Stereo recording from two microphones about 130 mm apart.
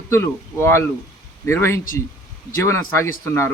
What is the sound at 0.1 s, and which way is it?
Speech, 20° left (ahead or behind).